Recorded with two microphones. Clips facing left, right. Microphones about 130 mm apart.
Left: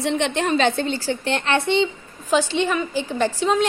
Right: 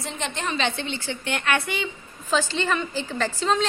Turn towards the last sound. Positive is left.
turn(degrees=10)  # may be behind; listen again after turning